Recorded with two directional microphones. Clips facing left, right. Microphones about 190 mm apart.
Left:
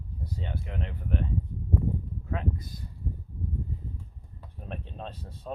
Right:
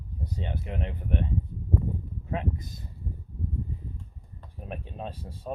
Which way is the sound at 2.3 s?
25° right (ahead or behind).